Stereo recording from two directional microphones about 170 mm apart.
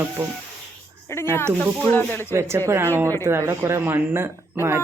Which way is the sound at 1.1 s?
15° left (ahead or behind).